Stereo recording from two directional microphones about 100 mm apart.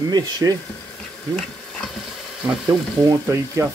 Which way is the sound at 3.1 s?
30° right (ahead or behind).